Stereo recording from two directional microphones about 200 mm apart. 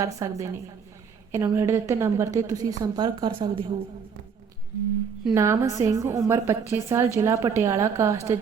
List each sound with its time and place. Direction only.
0.0 s a woman's voice: 15° right (ahead or behind)
5.2 s a woman's voice: 15° right (ahead or behind)